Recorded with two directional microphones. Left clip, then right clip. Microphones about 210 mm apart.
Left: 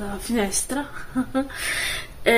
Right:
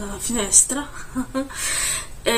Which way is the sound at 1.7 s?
Centre (ahead or behind).